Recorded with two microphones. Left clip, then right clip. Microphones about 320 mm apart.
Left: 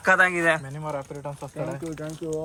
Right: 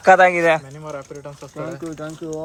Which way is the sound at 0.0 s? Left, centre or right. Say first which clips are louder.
Right 7 dB; centre.